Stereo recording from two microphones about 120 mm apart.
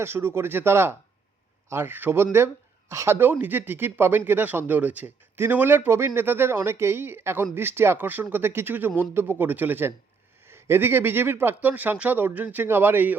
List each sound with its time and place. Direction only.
0.0 s speech: 20° right (ahead or behind)